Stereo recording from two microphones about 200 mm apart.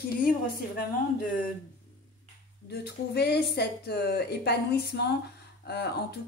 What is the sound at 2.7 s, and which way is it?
A woman's voice, 55° left (ahead or behind).